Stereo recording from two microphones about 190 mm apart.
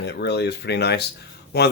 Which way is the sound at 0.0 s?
60° left (ahead or behind).